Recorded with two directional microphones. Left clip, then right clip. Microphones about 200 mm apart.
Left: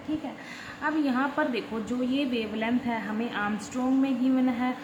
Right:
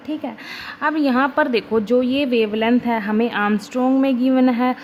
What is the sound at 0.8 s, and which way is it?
A woman's voice, 50° right (ahead or behind).